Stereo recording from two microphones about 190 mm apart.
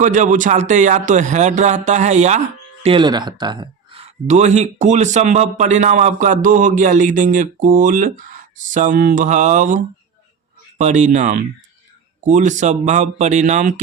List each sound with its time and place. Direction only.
0.0 s speech: 40° right (ahead or behind)
2.8 s speech: 25° right (ahead or behind)